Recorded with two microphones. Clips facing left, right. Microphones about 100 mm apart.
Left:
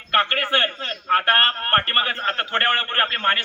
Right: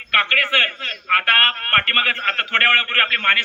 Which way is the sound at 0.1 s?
30° left (ahead or behind).